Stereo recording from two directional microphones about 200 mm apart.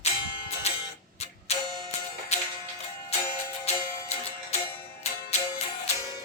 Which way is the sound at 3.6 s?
35° left (ahead or behind).